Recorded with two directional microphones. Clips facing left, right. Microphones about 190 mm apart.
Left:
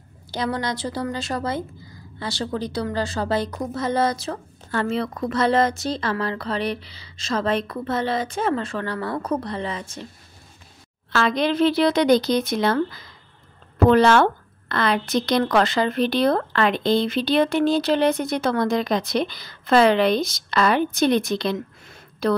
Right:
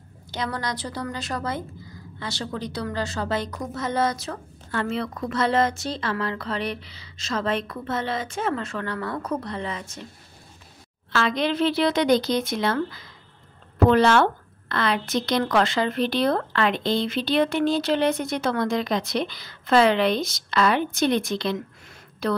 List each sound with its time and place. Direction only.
0.3 s a woman's voice: 30° left (ahead or behind)
11.1 s a woman's voice: 45° left (ahead or behind)